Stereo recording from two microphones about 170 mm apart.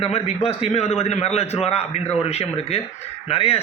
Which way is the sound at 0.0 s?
35° left (ahead or behind).